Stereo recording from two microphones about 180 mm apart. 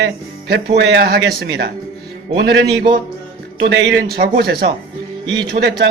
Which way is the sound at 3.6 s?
75° right (ahead or behind).